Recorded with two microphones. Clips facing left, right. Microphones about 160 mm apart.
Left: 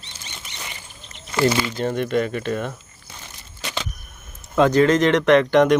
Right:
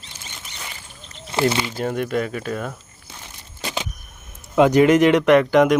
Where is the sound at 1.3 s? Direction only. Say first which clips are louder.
Left 1 dB; 25° right (ahead or behind).